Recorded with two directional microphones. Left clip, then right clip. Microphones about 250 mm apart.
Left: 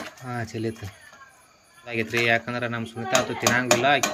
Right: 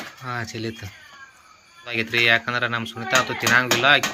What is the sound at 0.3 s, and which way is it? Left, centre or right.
Speech, centre.